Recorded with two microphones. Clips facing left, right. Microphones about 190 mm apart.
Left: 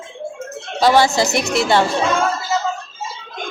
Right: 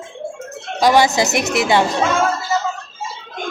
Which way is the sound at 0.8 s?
15° right (ahead or behind).